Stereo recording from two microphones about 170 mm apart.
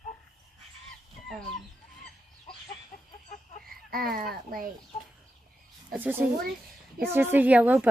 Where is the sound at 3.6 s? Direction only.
60° right (ahead or behind).